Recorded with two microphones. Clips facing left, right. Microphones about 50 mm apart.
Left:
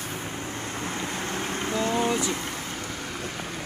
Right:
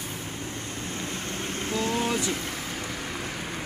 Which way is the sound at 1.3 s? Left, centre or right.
Left.